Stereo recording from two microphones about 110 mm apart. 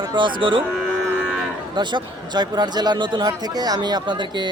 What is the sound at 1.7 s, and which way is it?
Speech, 45° right (ahead or behind).